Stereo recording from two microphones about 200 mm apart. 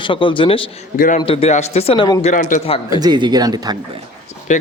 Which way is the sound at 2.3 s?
40° left (ahead or behind).